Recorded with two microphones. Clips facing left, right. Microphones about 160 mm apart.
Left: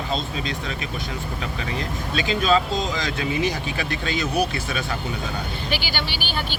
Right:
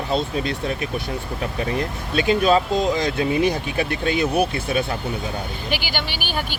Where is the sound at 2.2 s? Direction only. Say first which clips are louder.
Right 4 dB; 55° right (ahead or behind).